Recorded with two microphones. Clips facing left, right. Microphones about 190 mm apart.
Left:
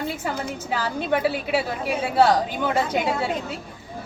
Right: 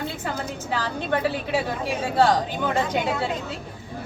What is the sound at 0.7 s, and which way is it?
A woman's voice, 10° left (ahead or behind).